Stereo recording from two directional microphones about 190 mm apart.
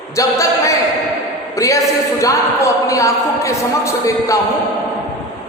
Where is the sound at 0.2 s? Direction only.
15° left (ahead or behind).